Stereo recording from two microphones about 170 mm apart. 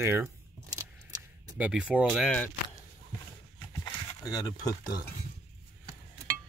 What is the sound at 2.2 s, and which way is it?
Speech, 10° left (ahead or behind).